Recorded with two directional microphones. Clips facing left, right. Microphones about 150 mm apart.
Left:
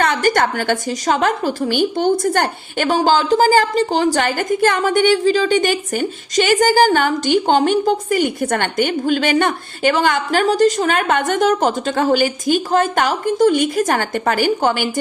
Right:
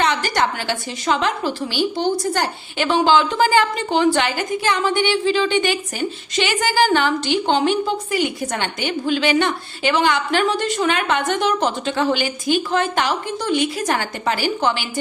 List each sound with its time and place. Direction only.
0.0 s a woman's voice: 50° left (ahead or behind)